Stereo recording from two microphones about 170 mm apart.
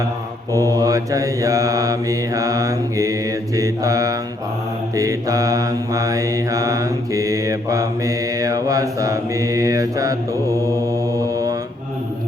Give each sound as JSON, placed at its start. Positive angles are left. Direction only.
{"t": 0.6, "sound": "mantra", "side_deg": -20}